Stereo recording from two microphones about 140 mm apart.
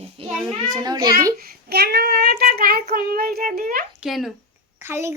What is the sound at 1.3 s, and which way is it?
Child singing, 90° right.